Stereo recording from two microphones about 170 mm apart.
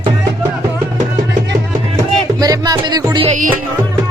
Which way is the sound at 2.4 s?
20° right (ahead or behind).